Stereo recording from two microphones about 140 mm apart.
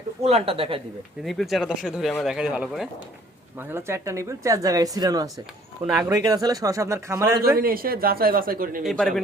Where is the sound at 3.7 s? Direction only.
20° right (ahead or behind).